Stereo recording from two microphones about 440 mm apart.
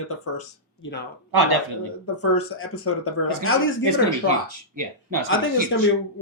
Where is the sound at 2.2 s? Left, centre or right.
Left.